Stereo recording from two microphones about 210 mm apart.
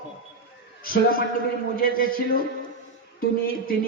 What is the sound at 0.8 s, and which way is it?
A man's voice, 45° left (ahead or behind).